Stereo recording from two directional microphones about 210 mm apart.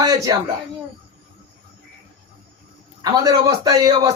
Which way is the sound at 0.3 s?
20° right (ahead or behind).